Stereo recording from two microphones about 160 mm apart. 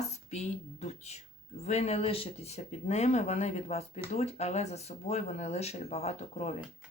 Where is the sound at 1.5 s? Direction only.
40° left (ahead or behind).